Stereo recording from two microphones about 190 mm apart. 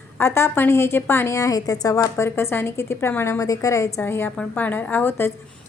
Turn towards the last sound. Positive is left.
turn(degrees=10)  # may be behind; listen again after turning